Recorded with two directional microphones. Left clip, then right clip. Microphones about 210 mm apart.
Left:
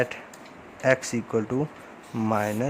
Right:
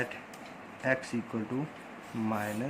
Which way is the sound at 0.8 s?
45° left (ahead or behind).